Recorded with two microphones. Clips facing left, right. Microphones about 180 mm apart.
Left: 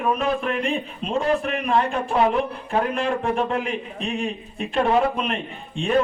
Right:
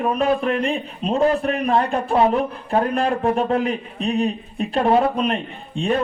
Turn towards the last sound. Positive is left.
turn(degrees=-35)  # may be behind; listen again after turning